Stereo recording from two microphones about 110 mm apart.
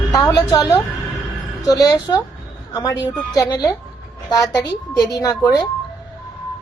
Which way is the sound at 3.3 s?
35° left (ahead or behind).